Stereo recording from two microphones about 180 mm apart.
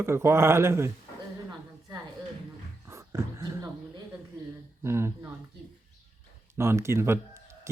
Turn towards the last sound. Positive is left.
turn(degrees=-15)  # may be behind; listen again after turning